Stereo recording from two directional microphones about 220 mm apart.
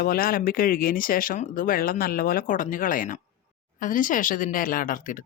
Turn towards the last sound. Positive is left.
turn(degrees=40)  # may be behind; listen again after turning